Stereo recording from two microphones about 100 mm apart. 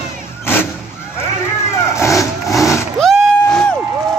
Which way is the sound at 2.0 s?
30° left (ahead or behind).